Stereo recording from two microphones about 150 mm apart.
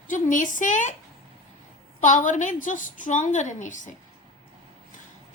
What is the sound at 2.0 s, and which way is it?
A woman's voice, 60° left (ahead or behind).